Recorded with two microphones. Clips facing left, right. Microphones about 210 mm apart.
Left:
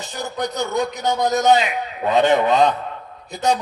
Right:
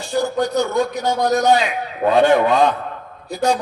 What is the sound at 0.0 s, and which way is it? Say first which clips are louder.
A man's voice: right 7 dB; 20° left (ahead or behind).